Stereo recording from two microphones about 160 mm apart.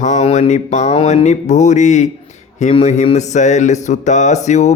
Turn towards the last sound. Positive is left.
turn(degrees=45)  # may be behind; listen again after turning